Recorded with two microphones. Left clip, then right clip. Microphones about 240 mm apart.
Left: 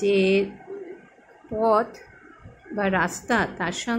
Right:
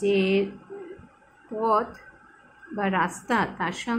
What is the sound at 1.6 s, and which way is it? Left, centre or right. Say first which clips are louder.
A woman's voice: left 3 dB; centre.